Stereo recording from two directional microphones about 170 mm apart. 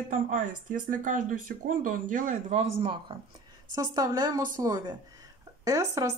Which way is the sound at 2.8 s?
30° right (ahead or behind).